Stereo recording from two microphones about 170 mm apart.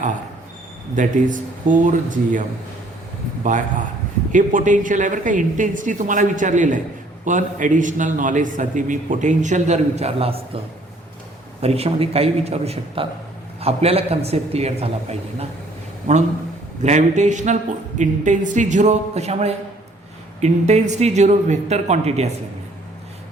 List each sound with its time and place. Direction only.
0.9 s a man's voice: 50° right (ahead or behind)
3.4 s a man's voice: 50° right (ahead or behind)
11.6 s speech: 35° right (ahead or behind)
16.8 s a man's voice: 45° right (ahead or behind)